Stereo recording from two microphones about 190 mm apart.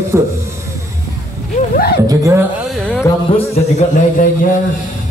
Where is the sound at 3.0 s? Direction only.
15° left (ahead or behind).